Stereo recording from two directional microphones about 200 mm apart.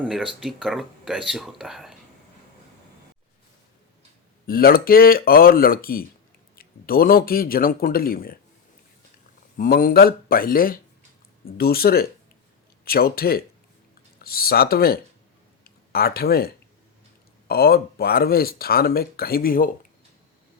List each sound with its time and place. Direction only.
0.0 s speech: centre (ahead or behind)
4.4 s speech: 45° left (ahead or behind)
9.6 s speech: 45° left (ahead or behind)